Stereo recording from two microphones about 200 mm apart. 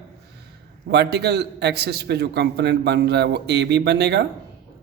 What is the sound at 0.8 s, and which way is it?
A man's voice, 55° right (ahead or behind).